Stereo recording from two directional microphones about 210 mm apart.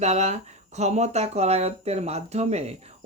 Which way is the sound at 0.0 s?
30° right (ahead or behind).